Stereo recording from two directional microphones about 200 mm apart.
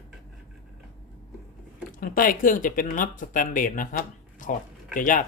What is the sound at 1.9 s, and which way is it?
Speech, 45° left (ahead or behind).